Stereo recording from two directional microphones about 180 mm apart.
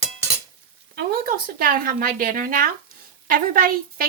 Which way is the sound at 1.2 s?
50° right (ahead or behind).